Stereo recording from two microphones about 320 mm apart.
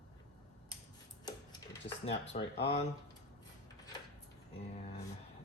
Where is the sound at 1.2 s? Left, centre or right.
Centre.